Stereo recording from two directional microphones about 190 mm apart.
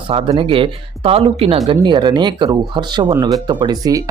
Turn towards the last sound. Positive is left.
turn(degrees=-20)  # may be behind; listen again after turning